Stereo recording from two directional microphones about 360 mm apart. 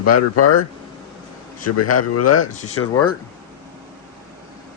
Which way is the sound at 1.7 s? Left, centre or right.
Left.